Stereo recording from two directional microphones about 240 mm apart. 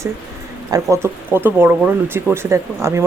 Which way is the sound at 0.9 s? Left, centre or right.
Centre.